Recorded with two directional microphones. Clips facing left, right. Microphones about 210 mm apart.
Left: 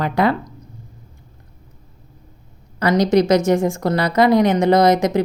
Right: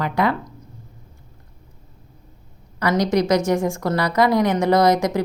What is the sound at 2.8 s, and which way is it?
Speech, 25° left (ahead or behind).